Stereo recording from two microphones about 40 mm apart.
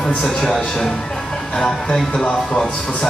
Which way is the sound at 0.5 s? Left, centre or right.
Centre.